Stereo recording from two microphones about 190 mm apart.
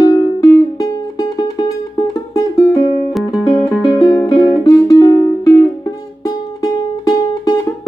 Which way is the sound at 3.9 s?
20° left (ahead or behind).